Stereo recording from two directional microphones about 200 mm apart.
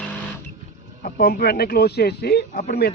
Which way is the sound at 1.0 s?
50° left (ahead or behind).